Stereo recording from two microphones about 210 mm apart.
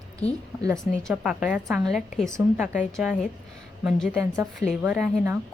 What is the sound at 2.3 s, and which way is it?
Speech, 15° right (ahead or behind).